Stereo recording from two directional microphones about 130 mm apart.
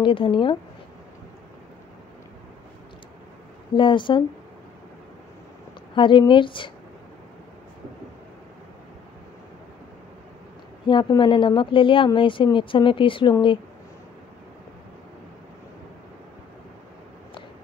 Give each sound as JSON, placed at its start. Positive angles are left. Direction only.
{"t": 0.0, "sound": "speech", "side_deg": 40}
{"t": 3.7, "sound": "speech", "side_deg": 40}
{"t": 5.9, "sound": "speech", "side_deg": 40}
{"t": 10.9, "sound": "speech", "side_deg": 40}